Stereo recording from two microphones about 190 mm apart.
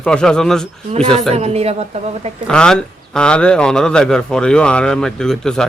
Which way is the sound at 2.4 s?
5° left (ahead or behind).